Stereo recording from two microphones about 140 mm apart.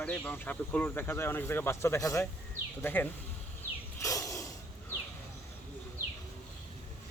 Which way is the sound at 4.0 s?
25° left (ahead or behind).